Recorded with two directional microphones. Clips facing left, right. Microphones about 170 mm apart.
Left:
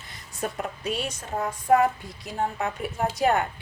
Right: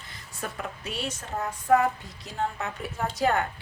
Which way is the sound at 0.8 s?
15° left (ahead or behind).